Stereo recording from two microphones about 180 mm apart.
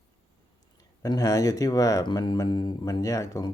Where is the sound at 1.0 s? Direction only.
20° left (ahead or behind).